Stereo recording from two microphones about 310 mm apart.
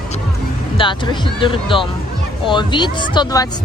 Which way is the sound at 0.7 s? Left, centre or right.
Centre.